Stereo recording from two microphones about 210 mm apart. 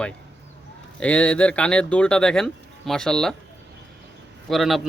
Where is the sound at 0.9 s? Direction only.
5° left (ahead or behind).